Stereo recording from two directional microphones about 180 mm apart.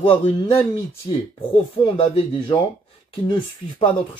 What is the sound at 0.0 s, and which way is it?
Speech, 30° left (ahead or behind).